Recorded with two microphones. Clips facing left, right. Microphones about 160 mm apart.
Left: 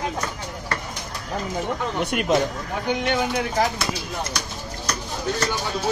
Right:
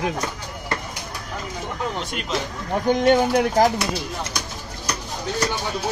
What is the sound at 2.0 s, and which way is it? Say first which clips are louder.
Speech: left 7 dB; 60° left (ahead or behind).